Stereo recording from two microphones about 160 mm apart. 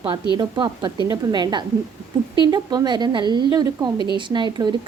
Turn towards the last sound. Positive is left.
turn(degrees=-30)  # may be behind; listen again after turning